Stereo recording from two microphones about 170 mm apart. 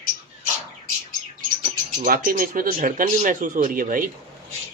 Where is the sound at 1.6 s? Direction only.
55° right (ahead or behind).